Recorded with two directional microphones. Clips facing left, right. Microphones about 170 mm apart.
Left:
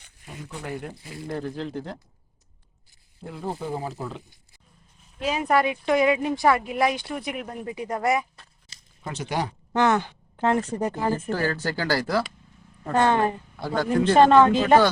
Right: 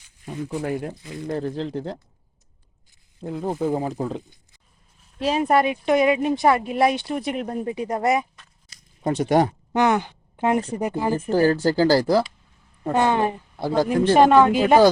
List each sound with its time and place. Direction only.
1.1 s speech: 25° right (ahead or behind)
1.4 s speech: 35° right (ahead or behind)
3.4 s speech: 20° right (ahead or behind)
3.8 s speech: 45° right (ahead or behind)
5.2 s speech: 35° right (ahead or behind)
8.4 s a sound: 30° left (ahead or behind)
9.0 s speech: 50° right (ahead or behind)
9.7 s a woman's voice: 15° right (ahead or behind)
11.3 s speech: 30° right (ahead or behind)
12.8 s speech: 15° right (ahead or behind)
13.6 s speech: 35° right (ahead or behind)
14.1 s speech: 10° right (ahead or behind)